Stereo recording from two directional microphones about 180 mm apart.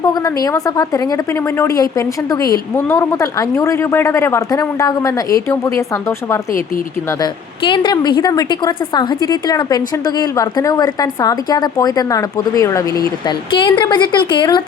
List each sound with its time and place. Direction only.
0.0 s a woman's voice: 20° left (ahead or behind)